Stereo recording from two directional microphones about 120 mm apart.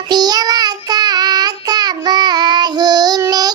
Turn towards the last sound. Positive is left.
turn(degrees=-30)  # may be behind; listen again after turning